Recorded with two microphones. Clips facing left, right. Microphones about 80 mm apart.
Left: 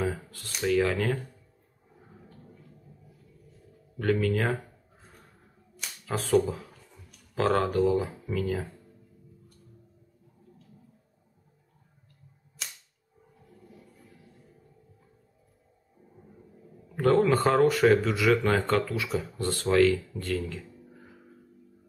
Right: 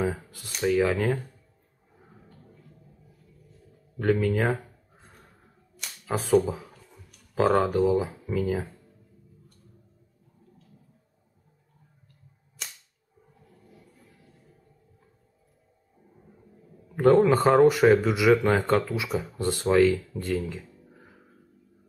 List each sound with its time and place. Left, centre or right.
0.0 s a sound: centre
0.7 s speech: centre
4.0 s speech: centre
6.0 s speech: centre
12.6 s cap gun: centre
16.9 s speech: centre